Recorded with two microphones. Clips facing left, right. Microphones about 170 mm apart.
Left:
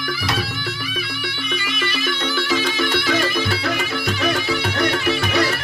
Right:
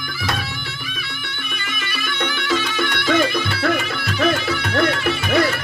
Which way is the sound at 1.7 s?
50° right (ahead or behind).